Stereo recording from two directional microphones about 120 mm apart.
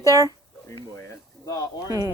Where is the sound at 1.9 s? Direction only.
30° right (ahead or behind).